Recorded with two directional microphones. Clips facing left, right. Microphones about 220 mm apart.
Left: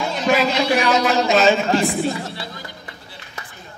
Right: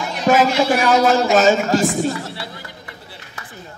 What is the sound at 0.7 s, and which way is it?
Speech, 50° right (ahead or behind).